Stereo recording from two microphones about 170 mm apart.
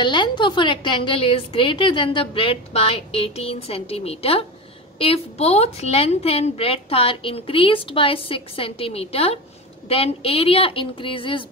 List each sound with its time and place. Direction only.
0.0 s a woman's voice: 25° left (ahead or behind)